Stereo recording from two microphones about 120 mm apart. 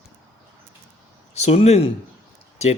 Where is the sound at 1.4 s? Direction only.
65° left (ahead or behind).